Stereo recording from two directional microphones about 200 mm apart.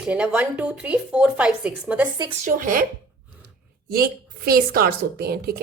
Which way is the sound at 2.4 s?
45° right (ahead or behind).